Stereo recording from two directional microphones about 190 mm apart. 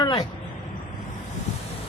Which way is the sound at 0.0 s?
20° left (ahead or behind).